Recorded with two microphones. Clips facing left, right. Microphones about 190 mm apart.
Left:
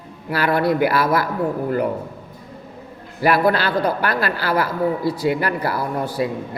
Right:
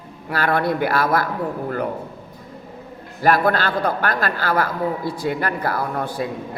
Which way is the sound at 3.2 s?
45° right (ahead or behind).